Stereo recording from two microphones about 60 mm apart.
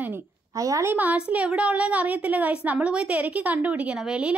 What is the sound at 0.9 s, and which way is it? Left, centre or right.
A woman's voice, right.